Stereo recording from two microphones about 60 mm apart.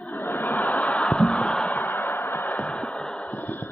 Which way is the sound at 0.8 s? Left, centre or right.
Centre.